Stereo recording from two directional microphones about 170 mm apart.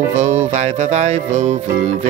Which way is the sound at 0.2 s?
45° right (ahead or behind).